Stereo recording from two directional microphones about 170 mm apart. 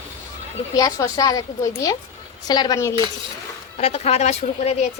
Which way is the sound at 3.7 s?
40° left (ahead or behind).